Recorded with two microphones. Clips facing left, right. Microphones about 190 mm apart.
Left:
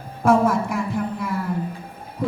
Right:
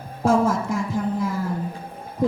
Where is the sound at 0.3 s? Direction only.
60° left (ahead or behind).